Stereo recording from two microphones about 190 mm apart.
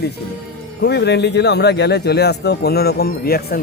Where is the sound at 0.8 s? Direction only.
60° left (ahead or behind).